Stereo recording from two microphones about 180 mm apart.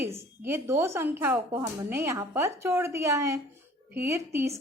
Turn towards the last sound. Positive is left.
turn(degrees=-15)  # may be behind; listen again after turning